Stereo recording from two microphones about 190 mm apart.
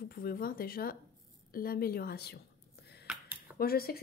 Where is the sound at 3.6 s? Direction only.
55° left (ahead or behind).